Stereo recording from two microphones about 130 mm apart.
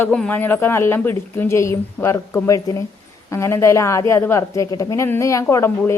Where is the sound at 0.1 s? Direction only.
10° left (ahead or behind).